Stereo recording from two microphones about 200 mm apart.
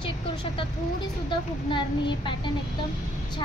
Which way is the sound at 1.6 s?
25° left (ahead or behind).